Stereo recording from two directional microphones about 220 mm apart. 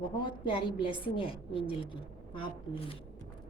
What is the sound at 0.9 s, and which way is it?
A woman's voice, 25° left (ahead or behind).